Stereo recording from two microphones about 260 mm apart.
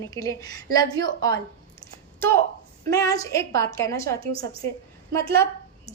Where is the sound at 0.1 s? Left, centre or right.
Centre.